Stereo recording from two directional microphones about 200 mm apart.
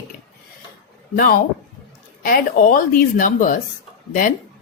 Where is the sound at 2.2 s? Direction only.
45° left (ahead or behind).